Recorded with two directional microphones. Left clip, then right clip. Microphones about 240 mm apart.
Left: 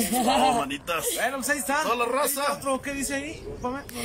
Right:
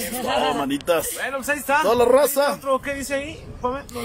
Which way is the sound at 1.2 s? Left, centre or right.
Centre.